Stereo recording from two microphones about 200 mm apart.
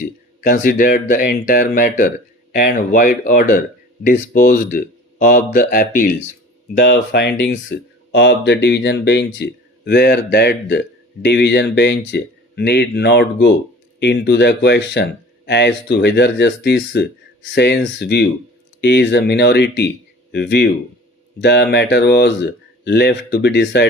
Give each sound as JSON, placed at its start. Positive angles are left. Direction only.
{"t": 0.0, "sound": "speech", "side_deg": 40}
{"t": 6.8, "sound": "speech", "side_deg": 60}